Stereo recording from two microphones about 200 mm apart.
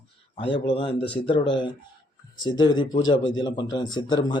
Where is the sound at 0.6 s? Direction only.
25° left (ahead or behind).